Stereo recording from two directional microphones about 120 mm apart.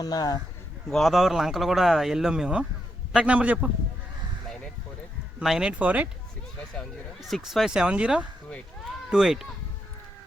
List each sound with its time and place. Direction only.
0.0 s speech: 30° left (ahead or behind)
0.9 s speech: centre (ahead or behind)
5.4 s speech: 5° right (ahead or behind)
6.7 s speech: centre (ahead or behind)